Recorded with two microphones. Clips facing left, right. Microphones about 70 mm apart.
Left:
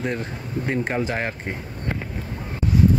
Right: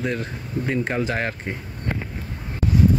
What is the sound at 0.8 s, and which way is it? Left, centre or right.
Speech, centre.